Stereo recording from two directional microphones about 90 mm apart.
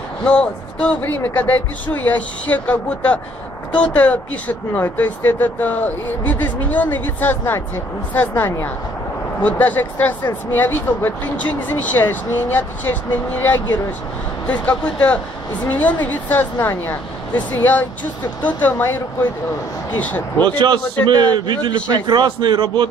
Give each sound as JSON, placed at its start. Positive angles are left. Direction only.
{"t": 0.3, "sound": "speech", "side_deg": 10}
{"t": 1.0, "sound": "speech", "side_deg": 20}
{"t": 20.4, "sound": "a man's voice", "side_deg": -60}